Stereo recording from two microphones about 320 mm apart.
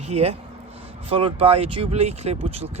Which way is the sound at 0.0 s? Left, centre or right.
Centre.